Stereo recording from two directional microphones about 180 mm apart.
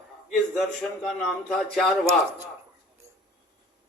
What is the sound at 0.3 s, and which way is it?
A man's voice, centre (ahead or behind).